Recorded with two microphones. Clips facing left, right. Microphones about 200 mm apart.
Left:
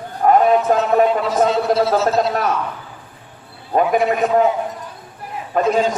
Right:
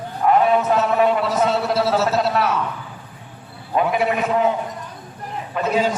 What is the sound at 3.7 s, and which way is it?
Speech, 45° left (ahead or behind).